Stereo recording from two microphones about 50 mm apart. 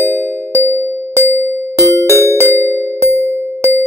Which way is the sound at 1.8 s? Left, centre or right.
Left.